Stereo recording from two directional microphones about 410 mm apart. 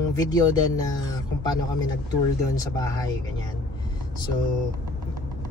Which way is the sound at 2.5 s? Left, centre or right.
Centre.